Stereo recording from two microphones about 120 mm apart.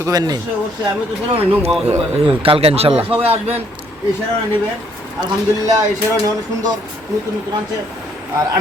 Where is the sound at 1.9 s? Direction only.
55° right (ahead or behind).